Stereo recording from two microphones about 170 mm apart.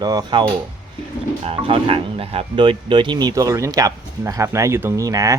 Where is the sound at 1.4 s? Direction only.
35° right (ahead or behind).